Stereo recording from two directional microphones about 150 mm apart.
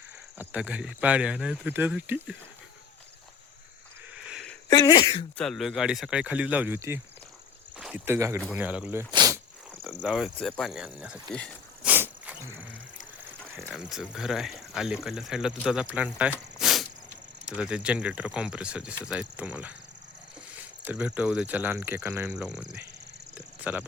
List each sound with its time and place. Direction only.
0.3 s speech: 10° right (ahead or behind)
4.7 s speech: 25° left (ahead or behind)
5.4 s speech: centre (ahead or behind)
9.1 s insect: 25° right (ahead or behind)
9.8 s speech: centre (ahead or behind)
11.8 s a sound: 10° right (ahead or behind)
13.7 s speech: 5° right (ahead or behind)
22.4 s speech: 5° right (ahead or behind)
23.3 s cricket: 10° right (ahead or behind)